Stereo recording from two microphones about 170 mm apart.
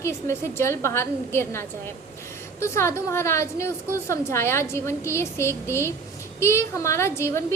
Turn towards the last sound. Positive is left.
turn(degrees=15)  # may be behind; listen again after turning